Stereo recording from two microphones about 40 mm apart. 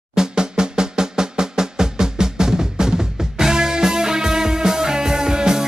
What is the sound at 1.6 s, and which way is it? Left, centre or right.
Music, centre.